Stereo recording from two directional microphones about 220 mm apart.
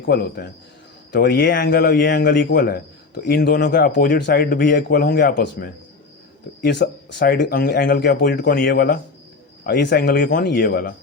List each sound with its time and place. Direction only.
0.0 s a man's voice: 50° left (ahead or behind)